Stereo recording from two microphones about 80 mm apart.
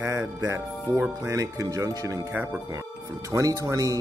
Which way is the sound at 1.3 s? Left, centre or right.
Right.